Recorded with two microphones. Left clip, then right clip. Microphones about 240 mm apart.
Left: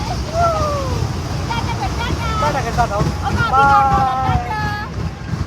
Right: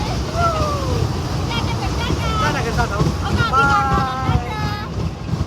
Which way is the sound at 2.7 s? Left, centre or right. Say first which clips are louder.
Left 3 dB; centre.